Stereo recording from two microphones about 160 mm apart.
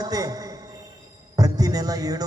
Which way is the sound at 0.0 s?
25° right (ahead or behind).